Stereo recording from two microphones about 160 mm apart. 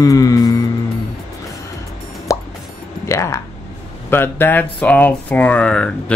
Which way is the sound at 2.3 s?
20° left (ahead or behind).